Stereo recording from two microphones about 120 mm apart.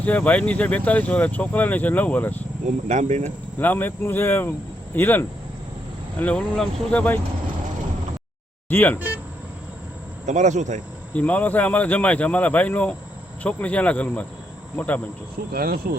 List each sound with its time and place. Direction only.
0.0 s speech: 10° left (ahead or behind)
2.6 s speech: 75° right (ahead or behind)
3.6 s speech: 15° left (ahead or behind)
8.7 s speech: 15° left (ahead or behind)
9.0 s a sound: 15° right (ahead or behind)
10.2 s speech: 80° right
11.1 s speech: 10° left (ahead or behind)